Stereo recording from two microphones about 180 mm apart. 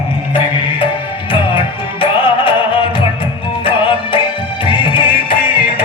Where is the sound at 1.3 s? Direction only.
30° left (ahead or behind).